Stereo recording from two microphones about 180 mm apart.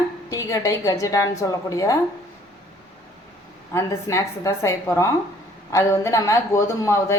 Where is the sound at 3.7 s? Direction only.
15° left (ahead or behind).